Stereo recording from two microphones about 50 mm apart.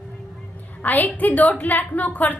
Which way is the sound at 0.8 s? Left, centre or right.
Left.